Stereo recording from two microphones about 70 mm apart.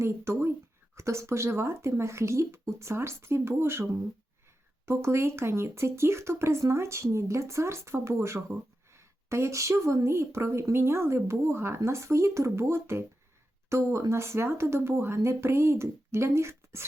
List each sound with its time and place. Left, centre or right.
0.0 s a woman's voice: right
4.9 s a woman's voice: right